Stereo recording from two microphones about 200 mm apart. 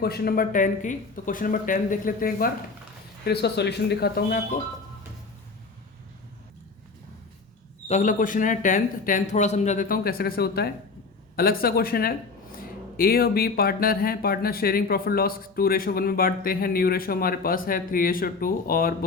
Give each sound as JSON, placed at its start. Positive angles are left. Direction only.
{"t": 0.0, "sound": "speech", "side_deg": 50}
{"t": 3.2, "sound": "speech", "side_deg": 55}
{"t": 7.9, "sound": "speech", "side_deg": 40}